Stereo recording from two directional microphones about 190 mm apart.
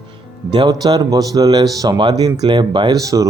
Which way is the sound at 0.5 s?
20° right (ahead or behind).